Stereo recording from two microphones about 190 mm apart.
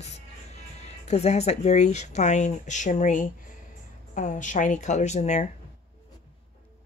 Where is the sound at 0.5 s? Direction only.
35° left (ahead or behind).